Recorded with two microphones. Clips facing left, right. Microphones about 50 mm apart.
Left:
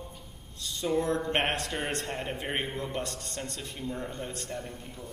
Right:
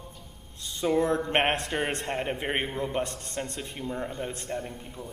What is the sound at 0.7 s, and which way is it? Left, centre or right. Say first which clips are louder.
A man's voice: right 3 dB; right.